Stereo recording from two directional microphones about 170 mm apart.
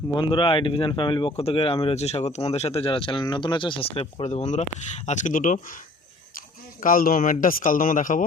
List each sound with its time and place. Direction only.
0.1 s speech: 30° left (ahead or behind); by 5.5 s 50° left (ahead or behind)
6.8 s a man's voice: 55° left (ahead or behind)